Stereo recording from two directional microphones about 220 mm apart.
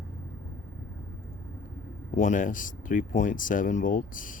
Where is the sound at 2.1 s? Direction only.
35° left (ahead or behind).